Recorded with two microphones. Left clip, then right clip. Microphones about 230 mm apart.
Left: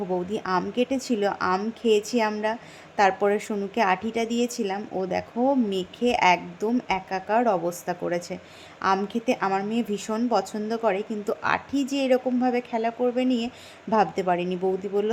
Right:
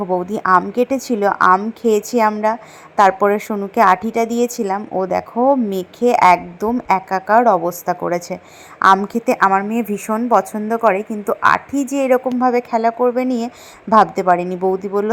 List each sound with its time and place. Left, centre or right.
0.1 s a woman's voice: centre
10.8 s a woman's voice: centre
11.7 s a woman's voice: right
12.4 s a woman's voice: centre